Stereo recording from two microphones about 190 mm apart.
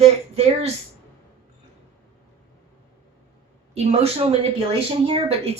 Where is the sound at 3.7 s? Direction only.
35° right (ahead or behind).